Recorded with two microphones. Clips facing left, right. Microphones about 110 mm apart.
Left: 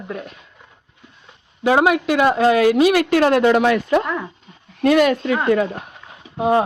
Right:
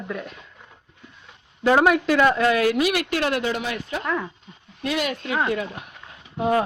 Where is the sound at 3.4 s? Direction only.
70° left (ahead or behind).